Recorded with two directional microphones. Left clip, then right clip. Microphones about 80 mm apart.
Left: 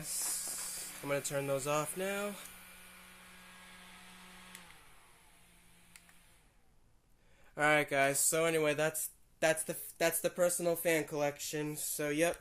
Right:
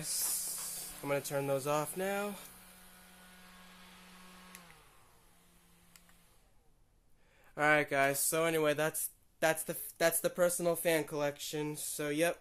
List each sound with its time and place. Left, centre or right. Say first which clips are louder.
0.0 s hiss: right 2 dB; right
0.7 s speech: right 1 dB; right
7.5 s speech: even; centre
10.2 s speech: right 1 dB; centre
11.0 s speech: even; centre